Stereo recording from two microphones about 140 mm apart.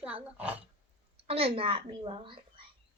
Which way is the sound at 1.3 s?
45° right (ahead or behind).